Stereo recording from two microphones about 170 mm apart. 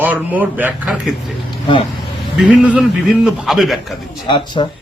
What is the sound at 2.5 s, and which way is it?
A man's voice, 5° right (ahead or behind).